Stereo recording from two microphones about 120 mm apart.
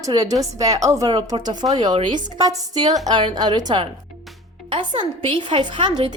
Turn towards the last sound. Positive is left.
turn(degrees=-45)  # may be behind; listen again after turning